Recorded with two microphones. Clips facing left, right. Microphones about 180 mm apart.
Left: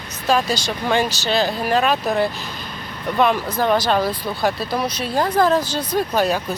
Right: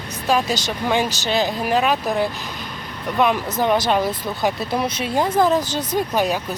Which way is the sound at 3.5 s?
20° right (ahead or behind).